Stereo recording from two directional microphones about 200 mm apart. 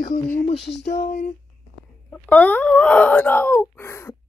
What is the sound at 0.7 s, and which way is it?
Speech, 60° left (ahead or behind).